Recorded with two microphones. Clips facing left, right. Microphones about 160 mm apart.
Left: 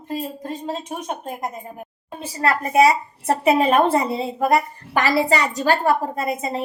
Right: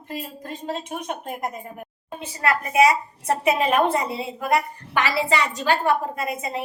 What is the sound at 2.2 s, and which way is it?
A woman's voice, 35° left (ahead or behind).